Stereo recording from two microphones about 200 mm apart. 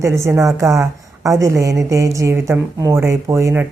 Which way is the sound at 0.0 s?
15° right (ahead or behind).